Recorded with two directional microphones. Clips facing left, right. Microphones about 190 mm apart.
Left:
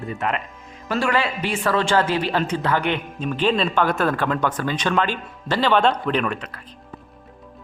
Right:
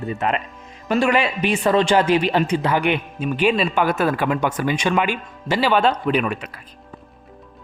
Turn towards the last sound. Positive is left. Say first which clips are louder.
# right 2 dB
turn(degrees=-10)  # may be behind; listen again after turning